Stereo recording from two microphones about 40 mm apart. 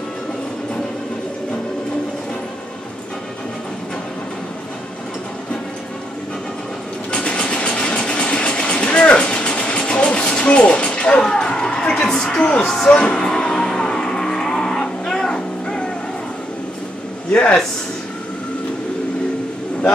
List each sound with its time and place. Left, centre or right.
7.1 s vehicle: left
9.1 s music: left
11.1 s a sound: centre
12.8 s music: left
17.3 s speech: left